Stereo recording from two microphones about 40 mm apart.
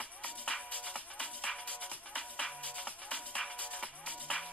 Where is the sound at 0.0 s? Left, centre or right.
Left.